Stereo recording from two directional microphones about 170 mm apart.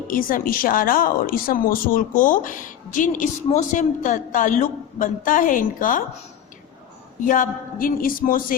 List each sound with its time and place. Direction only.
0.1 s a woman's voice: 55° left (ahead or behind)
7.2 s speech: 50° left (ahead or behind)